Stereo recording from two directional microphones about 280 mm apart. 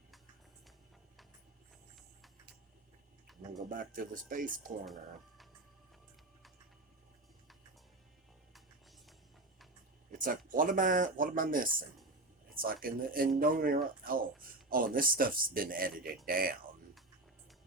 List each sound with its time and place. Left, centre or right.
3.7 s speech: right
10.1 s speech: right